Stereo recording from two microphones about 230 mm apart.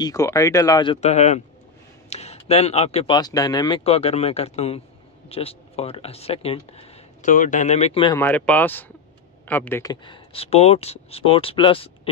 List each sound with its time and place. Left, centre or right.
0.0 s speech: centre
1.0 s speech: left
8.2 s speech: centre; by 12.1 s left